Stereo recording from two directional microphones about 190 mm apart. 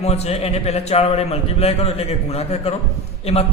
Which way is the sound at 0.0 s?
35° left (ahead or behind).